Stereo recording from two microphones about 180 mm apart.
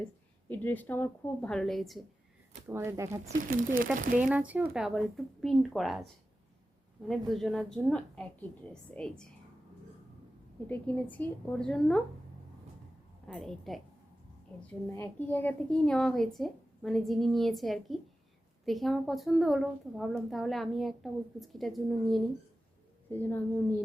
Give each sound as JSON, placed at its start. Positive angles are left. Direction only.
{"t": 0.4, "sound": "a woman's voice", "side_deg": 10}
{"t": 2.6, "sound": "a woman's voice", "side_deg": -15}
{"t": 7.1, "sound": "a woman's voice", "side_deg": 0}
{"t": 10.7, "sound": "a woman's voice", "side_deg": 10}
{"t": 13.2, "sound": "a woman's voice", "side_deg": 5}
{"t": 14.9, "sound": "a woman's voice", "side_deg": 10}
{"t": 23.1, "sound": "a woman's voice", "side_deg": 10}